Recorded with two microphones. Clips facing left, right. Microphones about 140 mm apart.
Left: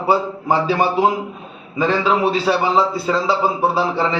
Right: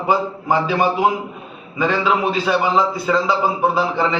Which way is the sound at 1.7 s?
35° left (ahead or behind).